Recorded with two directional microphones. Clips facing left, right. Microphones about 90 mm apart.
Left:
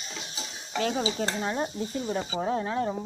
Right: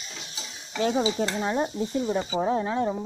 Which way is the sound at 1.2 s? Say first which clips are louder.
Right 3 dB; 20° right (ahead or behind).